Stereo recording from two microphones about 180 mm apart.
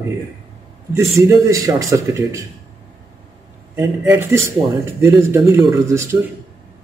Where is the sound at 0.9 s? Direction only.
15° right (ahead or behind).